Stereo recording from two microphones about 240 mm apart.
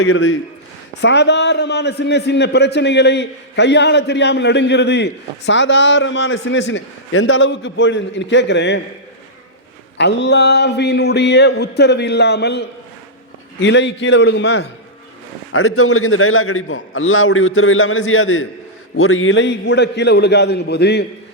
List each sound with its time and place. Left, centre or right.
0.0 s a man's voice: left
10.0 s a man's voice: left
15.5 s a man's voice: left